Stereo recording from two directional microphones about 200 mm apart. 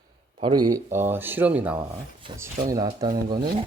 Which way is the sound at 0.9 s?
10° right (ahead or behind).